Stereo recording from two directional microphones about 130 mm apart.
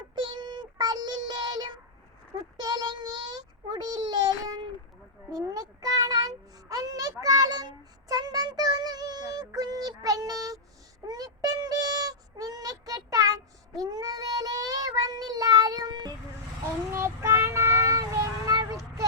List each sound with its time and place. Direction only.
0.2 s child singing: 35° right (ahead or behind)
11.0 s a sound: 30° right (ahead or behind)
16.9 s child singing: 20° right (ahead or behind)